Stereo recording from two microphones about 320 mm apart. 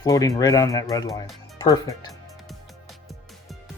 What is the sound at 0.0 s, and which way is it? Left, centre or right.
Speech, centre.